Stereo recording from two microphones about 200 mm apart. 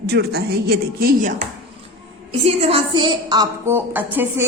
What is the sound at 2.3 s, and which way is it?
A woman's voice, 30° right (ahead or behind).